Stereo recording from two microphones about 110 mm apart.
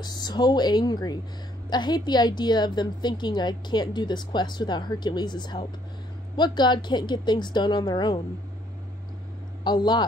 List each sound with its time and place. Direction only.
0.0 s a woman's voice: 40° left (ahead or behind)
9.7 s a man's voice: 40° left (ahead or behind)